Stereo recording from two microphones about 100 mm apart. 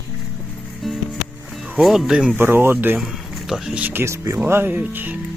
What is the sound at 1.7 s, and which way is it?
Speech, 5° right (ahead or behind).